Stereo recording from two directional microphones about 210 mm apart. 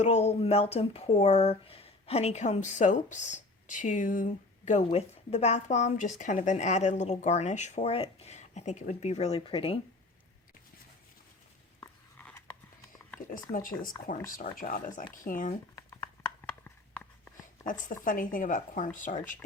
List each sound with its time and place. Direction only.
0.0 s speech: 30° left (ahead or behind)
11.8 s biting: 10° left (ahead or behind)
13.3 s speech: 40° left (ahead or behind)
15.7 s a sound: 15° left (ahead or behind)
17.6 s speech: 40° left (ahead or behind)